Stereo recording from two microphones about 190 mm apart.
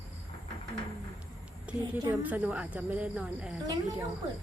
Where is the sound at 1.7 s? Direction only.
5° right (ahead or behind).